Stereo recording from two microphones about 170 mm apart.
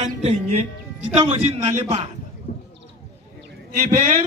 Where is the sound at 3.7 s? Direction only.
50° right (ahead or behind).